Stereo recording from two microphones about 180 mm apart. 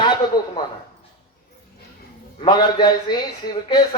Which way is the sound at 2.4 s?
25° left (ahead or behind).